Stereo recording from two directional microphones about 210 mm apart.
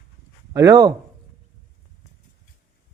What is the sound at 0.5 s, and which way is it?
Speech, 15° right (ahead or behind).